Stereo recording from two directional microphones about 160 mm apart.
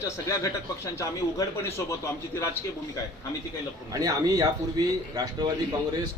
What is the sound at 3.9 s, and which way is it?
Speech, 25° right (ahead or behind).